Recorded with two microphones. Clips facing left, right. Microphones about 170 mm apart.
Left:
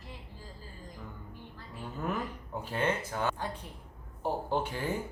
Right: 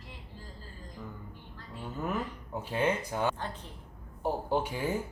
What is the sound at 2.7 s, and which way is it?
Speech, 15° right (ahead or behind).